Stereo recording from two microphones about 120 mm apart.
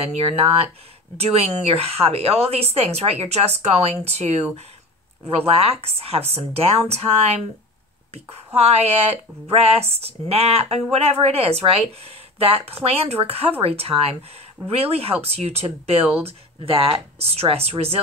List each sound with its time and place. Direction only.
0.0 s speech: 60° right (ahead or behind)
5.5 s speech: 55° right (ahead or behind)
8.5 s speech: 60° right (ahead or behind)